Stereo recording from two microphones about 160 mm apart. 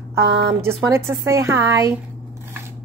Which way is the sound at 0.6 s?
15° right (ahead or behind).